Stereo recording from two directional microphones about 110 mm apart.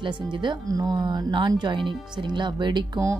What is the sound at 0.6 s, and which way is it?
Speech, 35° right (ahead or behind).